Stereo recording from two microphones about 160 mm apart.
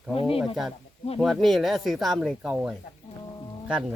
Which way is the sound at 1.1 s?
Centre (ahead or behind).